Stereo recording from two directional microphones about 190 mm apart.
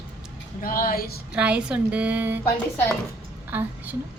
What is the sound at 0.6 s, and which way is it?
Speech, 50° left (ahead or behind).